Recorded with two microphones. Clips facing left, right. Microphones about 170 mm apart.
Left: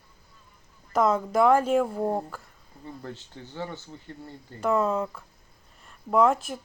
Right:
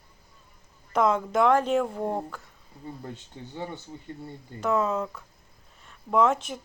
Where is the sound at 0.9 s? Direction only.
5° left (ahead or behind).